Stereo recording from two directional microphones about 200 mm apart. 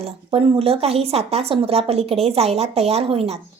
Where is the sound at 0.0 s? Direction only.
30° right (ahead or behind).